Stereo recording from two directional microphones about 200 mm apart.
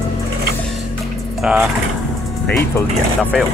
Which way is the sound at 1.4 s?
Centre (ahead or behind).